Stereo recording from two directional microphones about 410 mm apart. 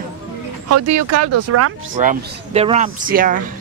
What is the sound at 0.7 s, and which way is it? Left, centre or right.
Speech, right.